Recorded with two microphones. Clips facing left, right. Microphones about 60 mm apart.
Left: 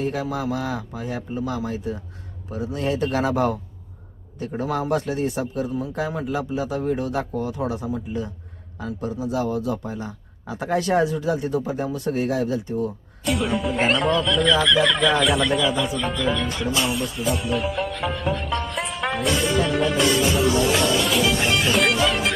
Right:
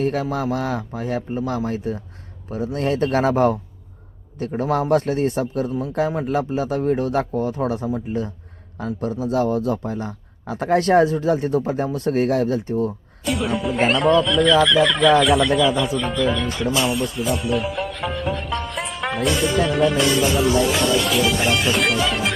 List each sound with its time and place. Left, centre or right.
0.0 s a man's voice: right
13.2 s speech: centre